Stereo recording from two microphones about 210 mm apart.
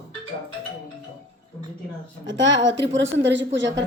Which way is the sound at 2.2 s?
60° right (ahead or behind).